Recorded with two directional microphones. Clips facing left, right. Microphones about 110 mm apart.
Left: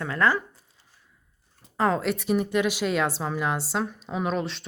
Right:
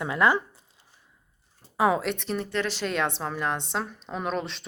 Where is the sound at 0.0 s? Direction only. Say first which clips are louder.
Right 1 dB; 15° right (ahead or behind).